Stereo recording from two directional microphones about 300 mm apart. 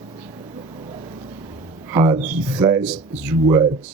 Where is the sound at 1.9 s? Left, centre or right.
Centre.